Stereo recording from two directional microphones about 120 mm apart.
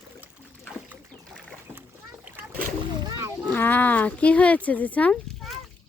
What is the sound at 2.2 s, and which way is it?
Boat, 15° right (ahead or behind).